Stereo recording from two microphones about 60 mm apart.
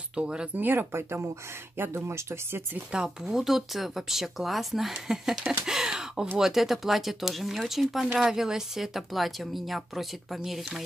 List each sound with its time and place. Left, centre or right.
0.1 s speech: centre
0.6 s speech: right
1.8 s speech: right
2.9 s a woman's voice: centre